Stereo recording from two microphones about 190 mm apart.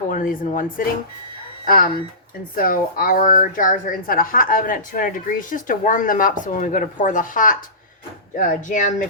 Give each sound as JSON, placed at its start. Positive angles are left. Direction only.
{"t": 0.1, "sound": "a woman's voice", "side_deg": 45}